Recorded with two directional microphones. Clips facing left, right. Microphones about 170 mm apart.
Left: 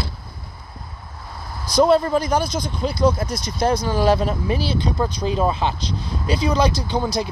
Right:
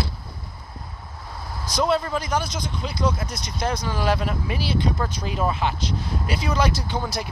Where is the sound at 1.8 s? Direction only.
35° left (ahead or behind).